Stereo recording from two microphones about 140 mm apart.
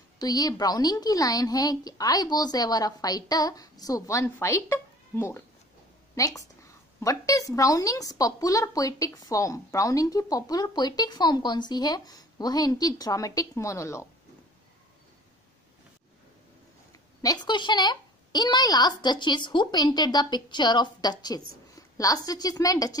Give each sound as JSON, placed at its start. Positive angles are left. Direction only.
{"t": 0.2, "sound": "a woman's voice", "side_deg": 25}
{"t": 16.9, "sound": "a woman's voice", "side_deg": 25}